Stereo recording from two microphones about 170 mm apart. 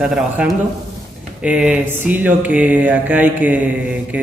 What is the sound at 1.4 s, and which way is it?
Mantra, 10° right (ahead or behind).